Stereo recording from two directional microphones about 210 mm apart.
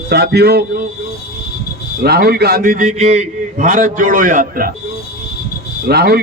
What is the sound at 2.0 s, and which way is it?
A man's voice, 50° right (ahead or behind).